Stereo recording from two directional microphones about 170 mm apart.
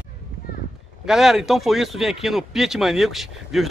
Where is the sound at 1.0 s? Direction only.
Centre (ahead or behind).